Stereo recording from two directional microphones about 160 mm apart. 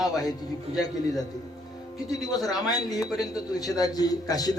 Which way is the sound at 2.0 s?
25° left (ahead or behind).